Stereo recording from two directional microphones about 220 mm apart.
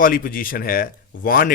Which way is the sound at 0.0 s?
40° left (ahead or behind).